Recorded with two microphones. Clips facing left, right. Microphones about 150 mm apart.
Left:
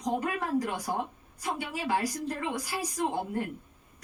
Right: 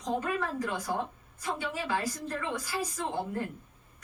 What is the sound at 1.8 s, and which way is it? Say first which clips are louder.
A woman's voice: left 3 dB; 15° left (ahead or behind).